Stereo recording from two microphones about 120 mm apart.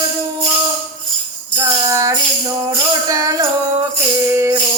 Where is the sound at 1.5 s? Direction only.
25° right (ahead or behind).